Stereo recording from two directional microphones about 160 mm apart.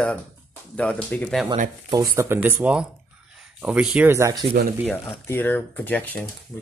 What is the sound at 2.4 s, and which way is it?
Speech, 10° right (ahead or behind).